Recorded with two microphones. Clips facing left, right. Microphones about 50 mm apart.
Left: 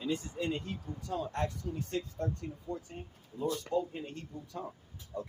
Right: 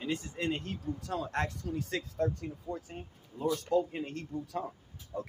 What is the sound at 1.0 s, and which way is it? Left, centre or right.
Speech, right.